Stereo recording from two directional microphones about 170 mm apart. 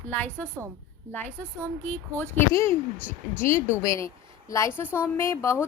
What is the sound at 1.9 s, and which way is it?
A woman's voice, 10° left (ahead or behind).